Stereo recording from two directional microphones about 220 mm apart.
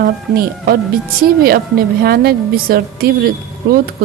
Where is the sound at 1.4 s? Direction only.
45° right (ahead or behind).